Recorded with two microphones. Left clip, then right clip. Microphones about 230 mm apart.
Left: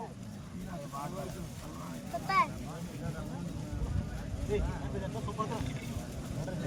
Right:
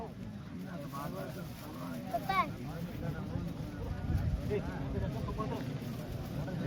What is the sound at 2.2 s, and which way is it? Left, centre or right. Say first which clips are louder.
Vehicle: left 4 dB; left.